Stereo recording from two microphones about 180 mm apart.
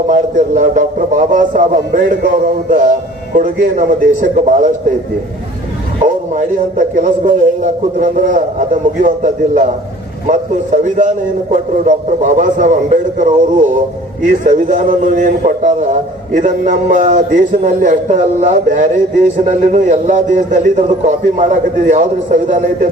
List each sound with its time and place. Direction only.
0.1 s a man's voice: 45° right (ahead or behind)
6.3 s a man's voice: 50° right (ahead or behind)